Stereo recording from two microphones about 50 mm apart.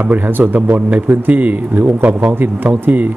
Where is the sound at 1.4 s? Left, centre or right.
Right.